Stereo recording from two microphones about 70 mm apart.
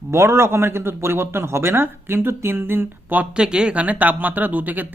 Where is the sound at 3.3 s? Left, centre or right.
Centre.